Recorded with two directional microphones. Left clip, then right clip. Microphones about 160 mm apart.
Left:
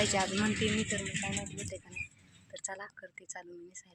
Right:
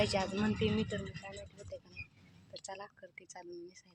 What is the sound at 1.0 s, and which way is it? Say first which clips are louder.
Speech: left 9 dB; 40° right (ahead or behind).